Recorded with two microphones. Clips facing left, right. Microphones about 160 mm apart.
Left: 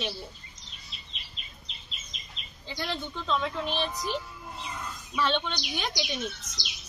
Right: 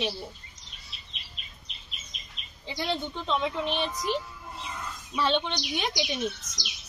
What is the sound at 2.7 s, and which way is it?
A woman's voice, 20° right (ahead or behind).